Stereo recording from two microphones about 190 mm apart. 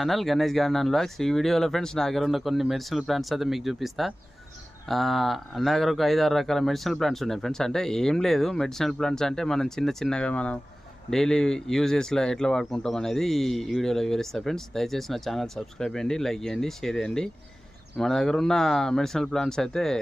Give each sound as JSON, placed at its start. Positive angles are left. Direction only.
{"t": 0.0, "sound": "speech", "side_deg": 0}